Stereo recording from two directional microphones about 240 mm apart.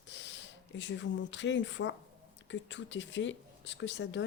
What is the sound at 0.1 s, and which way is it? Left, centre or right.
Speech, left.